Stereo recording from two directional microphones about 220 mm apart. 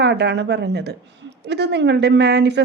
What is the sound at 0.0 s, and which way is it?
A woman's voice, 50° right (ahead or behind).